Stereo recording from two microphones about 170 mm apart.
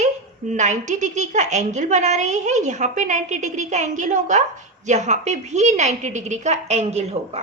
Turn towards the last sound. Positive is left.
turn(degrees=-40)  # may be behind; listen again after turning